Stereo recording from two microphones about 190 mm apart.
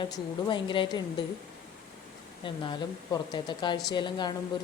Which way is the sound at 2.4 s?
25° left (ahead or behind).